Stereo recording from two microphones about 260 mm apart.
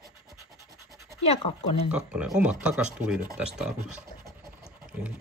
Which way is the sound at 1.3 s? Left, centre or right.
Left.